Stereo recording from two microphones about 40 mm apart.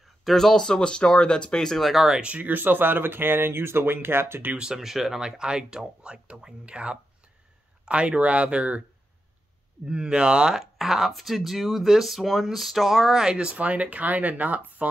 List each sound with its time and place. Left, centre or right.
0.0 s a sound: centre
0.6 s speech: centre
1.6 s speech: centre
1.9 s speech: centre
2.2 s speech: right
2.5 s speech: right
4.7 s speech: centre; by 8.8 s right
9.8 s speech: right
10.6 s speech: centre
13.3 s speech: right
13.6 s speech: right